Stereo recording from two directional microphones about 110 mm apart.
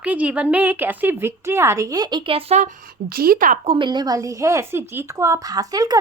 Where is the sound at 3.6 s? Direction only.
60° right (ahead or behind).